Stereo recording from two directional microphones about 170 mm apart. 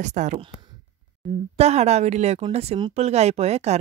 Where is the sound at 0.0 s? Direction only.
45° right (ahead or behind).